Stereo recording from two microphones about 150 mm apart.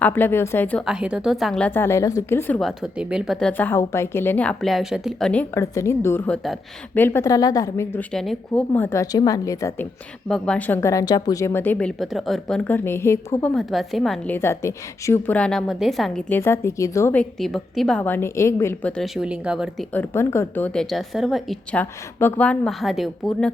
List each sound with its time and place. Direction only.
0.0 s a woman's voice: 15° left (ahead or behind)
0.9 s a woman's voice: 5° right (ahead or behind); by 2.6 s 15° left (ahead or behind)
2.6 s a woman's voice: centre (ahead or behind)
3.4 s a woman's voice: 10° left (ahead or behind)
5.5 s a woman's voice: 20° left (ahead or behind); by 6.6 s 5° left (ahead or behind)
6.9 s a woman's voice: 15° left (ahead or behind)
7.9 s a woman's voice: 5° left (ahead or behind)
8.7 s a woman's voice: 15° left (ahead or behind)
10.2 s a woman's voice: 5° left (ahead or behind)
10.8 s a woman's voice: 20° left (ahead or behind); by 14.3 s centre (ahead or behind)
14.3 s a woman's voice: 15° left (ahead or behind); by 16.2 s centre (ahead or behind)
16.3 s a woman's voice: 15° left (ahead or behind)
17.4 s a woman's voice: centre (ahead or behind)
19.9 s a woman's voice: 15° left (ahead or behind)